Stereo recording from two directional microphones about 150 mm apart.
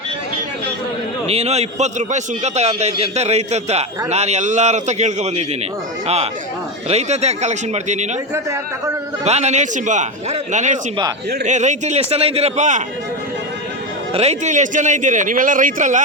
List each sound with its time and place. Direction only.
1.3 s a man's voice: 45° right (ahead or behind)
6.8 s a man's voice: 45° right (ahead or behind)
9.2 s a man's voice: 50° right (ahead or behind)
14.1 s a man's voice: 45° right (ahead or behind)